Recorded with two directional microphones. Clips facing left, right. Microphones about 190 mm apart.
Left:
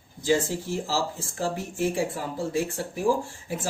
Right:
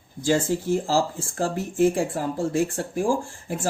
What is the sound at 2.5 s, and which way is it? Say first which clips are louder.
Speech: right 4 dB; 50° right (ahead or behind).